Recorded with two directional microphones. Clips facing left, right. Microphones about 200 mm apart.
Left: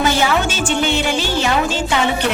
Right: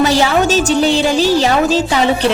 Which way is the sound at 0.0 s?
35° right (ahead or behind).